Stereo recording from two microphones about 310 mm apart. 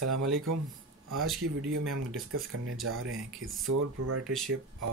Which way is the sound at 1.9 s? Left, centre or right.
Right.